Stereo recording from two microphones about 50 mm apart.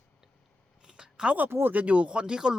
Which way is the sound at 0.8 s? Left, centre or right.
Centre.